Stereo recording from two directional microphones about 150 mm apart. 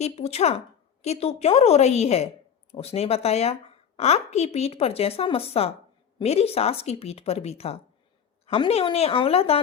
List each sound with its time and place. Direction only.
0.0 s a woman's voice: 45° left (ahead or behind)